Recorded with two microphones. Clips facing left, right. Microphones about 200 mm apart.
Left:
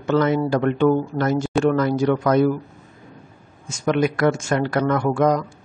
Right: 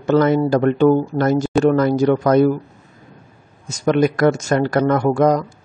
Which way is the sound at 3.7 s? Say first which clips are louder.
Right 4 dB; 40° right (ahead or behind).